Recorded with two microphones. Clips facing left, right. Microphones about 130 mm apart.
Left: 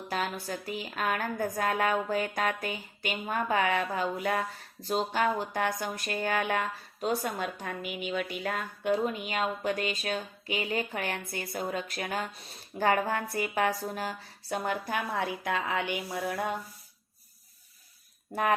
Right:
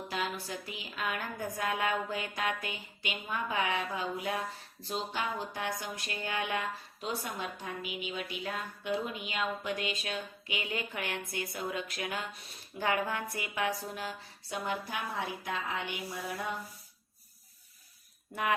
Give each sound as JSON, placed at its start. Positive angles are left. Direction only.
{"t": 0.1, "sound": "a woman's voice", "side_deg": 45}
{"t": 18.3, "sound": "speech", "side_deg": 40}